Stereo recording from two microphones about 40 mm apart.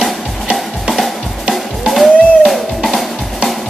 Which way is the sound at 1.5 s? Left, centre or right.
Centre.